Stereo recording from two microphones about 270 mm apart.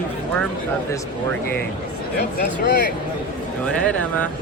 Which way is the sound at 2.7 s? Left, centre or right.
Left.